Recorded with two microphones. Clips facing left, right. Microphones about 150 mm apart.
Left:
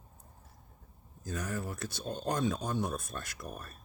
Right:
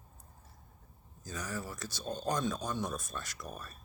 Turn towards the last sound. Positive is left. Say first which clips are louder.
# left 1 dB
turn(degrees=55)  # may be behind; listen again after turning